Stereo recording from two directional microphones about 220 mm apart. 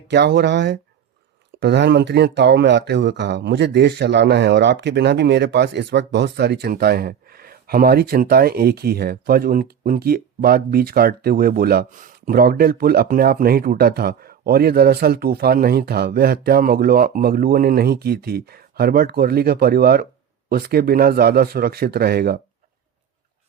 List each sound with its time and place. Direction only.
0.1 s speech: 50° right (ahead or behind)